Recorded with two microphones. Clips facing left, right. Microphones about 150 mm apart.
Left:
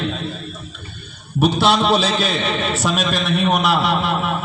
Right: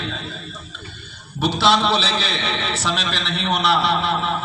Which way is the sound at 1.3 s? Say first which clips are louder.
Left 2 dB; 50° left (ahead or behind).